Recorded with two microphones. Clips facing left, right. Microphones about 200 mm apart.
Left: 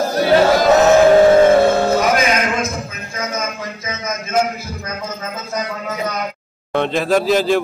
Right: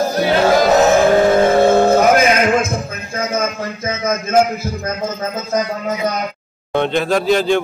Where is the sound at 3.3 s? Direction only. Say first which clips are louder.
Right 5 dB; 50° right (ahead or behind).